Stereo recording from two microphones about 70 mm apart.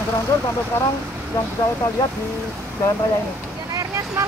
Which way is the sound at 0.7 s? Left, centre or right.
Left.